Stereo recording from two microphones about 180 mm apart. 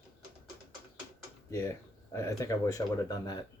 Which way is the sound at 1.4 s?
15° left (ahead or behind).